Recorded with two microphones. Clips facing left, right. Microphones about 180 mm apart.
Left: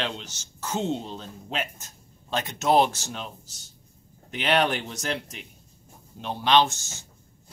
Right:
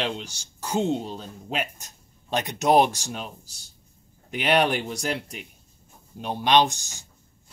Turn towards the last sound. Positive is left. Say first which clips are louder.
# right 1 dB
turn(degrees=-15)  # may be behind; listen again after turning